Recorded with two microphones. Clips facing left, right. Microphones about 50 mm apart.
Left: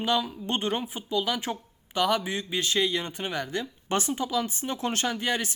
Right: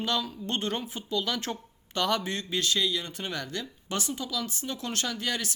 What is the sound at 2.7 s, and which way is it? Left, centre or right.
Speech, left.